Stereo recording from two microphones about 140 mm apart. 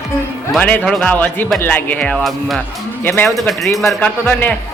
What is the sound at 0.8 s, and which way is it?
Speech, centre (ahead or behind).